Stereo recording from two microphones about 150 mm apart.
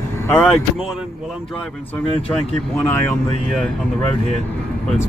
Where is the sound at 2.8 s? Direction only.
15° left (ahead or behind).